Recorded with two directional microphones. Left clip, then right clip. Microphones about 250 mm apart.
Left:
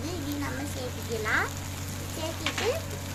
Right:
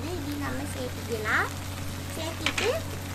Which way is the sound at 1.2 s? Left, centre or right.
Centre.